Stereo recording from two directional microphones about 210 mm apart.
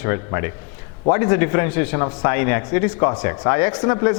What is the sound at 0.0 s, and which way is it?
Speech, 15° left (ahead or behind).